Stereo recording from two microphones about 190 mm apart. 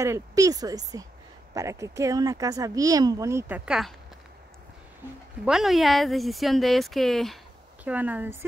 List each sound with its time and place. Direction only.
0.0 s speech: 15° right (ahead or behind)
5.4 s speech: centre (ahead or behind)